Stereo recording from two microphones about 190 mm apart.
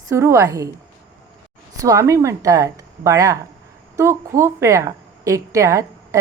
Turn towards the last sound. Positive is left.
turn(degrees=-15)  # may be behind; listen again after turning